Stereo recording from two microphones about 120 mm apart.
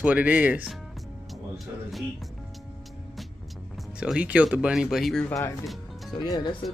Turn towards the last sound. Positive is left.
turn(degrees=35)  # may be behind; listen again after turning